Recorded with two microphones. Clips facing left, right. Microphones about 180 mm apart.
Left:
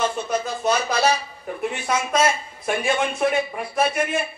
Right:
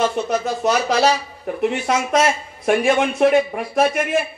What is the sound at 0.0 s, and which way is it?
A man's voice, 65° right (ahead or behind).